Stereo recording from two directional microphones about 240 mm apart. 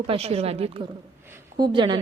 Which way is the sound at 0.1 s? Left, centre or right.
Right.